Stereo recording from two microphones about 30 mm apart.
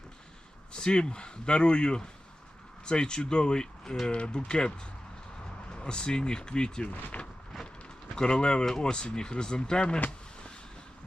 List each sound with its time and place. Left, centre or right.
0.7 s a man's voice: left
7.1 s a sound: left
8.1 s speech: left